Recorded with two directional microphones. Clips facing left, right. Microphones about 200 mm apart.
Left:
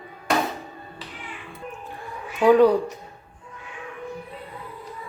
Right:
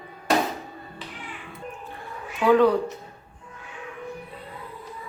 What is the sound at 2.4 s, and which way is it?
Speech, 10° left (ahead or behind).